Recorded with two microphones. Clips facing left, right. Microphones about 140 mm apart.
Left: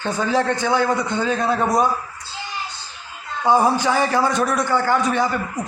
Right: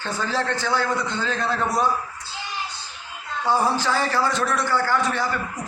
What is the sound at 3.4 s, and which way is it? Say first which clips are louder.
A man's voice: left 5 dB; 15° left (ahead or behind).